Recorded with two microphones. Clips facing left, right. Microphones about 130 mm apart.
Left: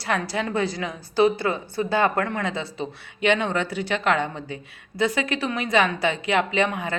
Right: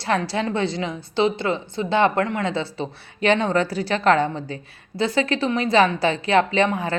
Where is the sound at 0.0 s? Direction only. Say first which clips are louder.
Right 3 dB; 30° right (ahead or behind).